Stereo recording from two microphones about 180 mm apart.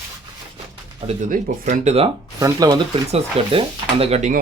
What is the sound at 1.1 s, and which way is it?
Speech, 45° right (ahead or behind).